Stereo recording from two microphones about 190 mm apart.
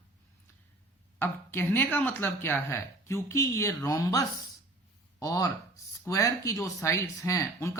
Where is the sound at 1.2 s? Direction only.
10° left (ahead or behind).